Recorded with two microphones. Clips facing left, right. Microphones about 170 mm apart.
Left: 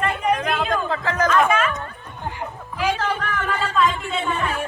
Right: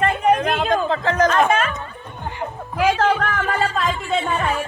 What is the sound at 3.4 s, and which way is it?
Speech, 45° right (ahead or behind).